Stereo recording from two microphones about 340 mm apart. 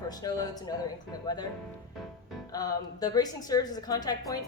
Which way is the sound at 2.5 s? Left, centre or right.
Centre.